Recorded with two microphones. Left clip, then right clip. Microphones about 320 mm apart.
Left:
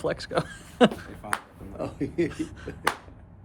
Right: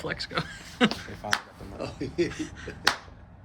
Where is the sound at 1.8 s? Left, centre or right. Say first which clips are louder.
Left 1 dB; left.